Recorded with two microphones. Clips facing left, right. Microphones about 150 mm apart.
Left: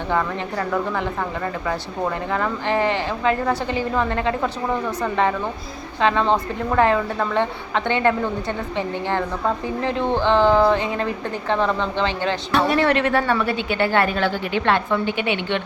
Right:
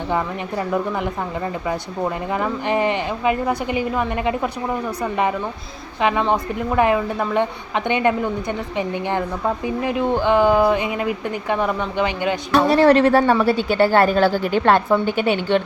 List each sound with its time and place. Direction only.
1.6 s a woman's voice: 15° right (ahead or behind)
6.0 s a woman's voice: 15° right (ahead or behind)
12.5 s a woman's voice: 35° right (ahead or behind)